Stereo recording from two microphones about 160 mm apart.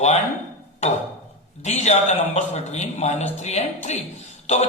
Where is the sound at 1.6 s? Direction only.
45° left (ahead or behind).